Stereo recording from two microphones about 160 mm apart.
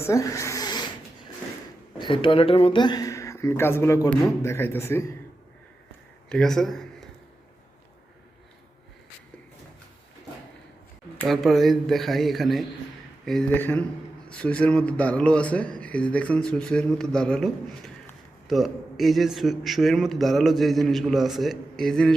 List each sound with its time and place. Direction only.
0.0 s a sound: 20° left (ahead or behind)
2.0 s speech: 30° left (ahead or behind); by 5.1 s 15° left (ahead or behind)
6.2 s speech: 5° left (ahead or behind)
11.3 s a man's voice: centre (ahead or behind)